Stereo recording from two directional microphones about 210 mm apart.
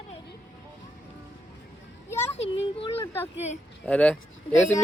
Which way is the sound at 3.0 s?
10° left (ahead or behind).